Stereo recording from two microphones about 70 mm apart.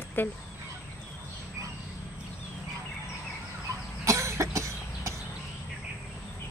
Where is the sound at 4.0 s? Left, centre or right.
Right.